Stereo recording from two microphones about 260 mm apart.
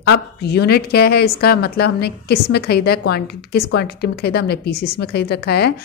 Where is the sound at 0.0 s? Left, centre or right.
Left.